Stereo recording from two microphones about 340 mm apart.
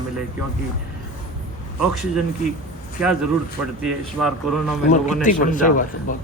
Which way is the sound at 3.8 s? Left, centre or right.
Centre.